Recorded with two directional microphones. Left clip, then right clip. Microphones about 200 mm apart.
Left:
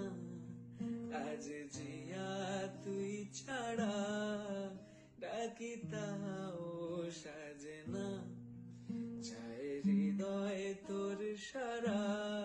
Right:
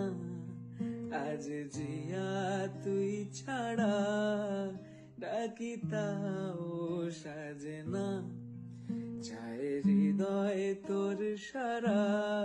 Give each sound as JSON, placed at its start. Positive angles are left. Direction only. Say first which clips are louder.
{"t": 1.0, "sound": "music", "louder": "right 7 dB", "side_deg": -50}
{"t": 7.6, "sound": "mantra", "louder": "right 7 dB", "side_deg": -50}
{"t": 9.5, "sound": "mantra", "louder": "right 7 dB", "side_deg": -50}